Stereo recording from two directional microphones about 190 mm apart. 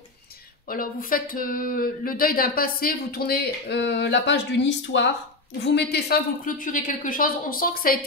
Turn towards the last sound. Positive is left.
turn(degrees=50)  # may be behind; listen again after turning